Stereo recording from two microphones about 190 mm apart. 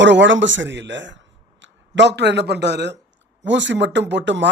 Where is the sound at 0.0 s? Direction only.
70° right (ahead or behind).